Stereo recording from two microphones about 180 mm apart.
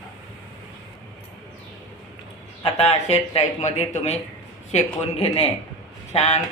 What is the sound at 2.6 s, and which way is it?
Speech, 35° left (ahead or behind).